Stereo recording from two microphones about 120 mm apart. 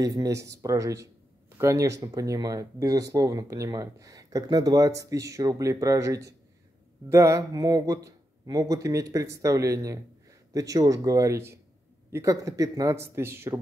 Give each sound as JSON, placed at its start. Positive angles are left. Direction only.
{"t": 0.0, "sound": "speech", "side_deg": -30}